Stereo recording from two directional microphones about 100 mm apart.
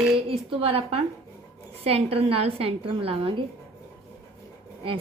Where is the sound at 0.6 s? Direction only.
80° right.